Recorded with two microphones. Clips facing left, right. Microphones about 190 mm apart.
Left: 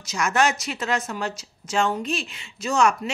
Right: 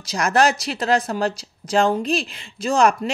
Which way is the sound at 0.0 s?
35° right (ahead or behind).